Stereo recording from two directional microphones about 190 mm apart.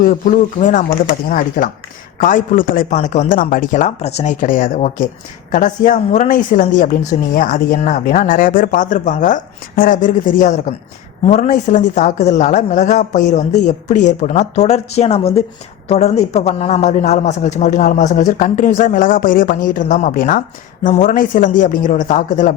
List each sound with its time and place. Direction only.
0.0 s a woman's voice: 45° left (ahead or behind)